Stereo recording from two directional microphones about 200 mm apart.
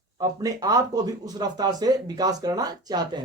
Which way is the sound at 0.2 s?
20° right (ahead or behind).